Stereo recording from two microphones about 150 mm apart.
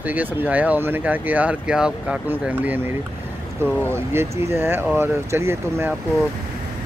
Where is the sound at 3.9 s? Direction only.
20° right (ahead or behind).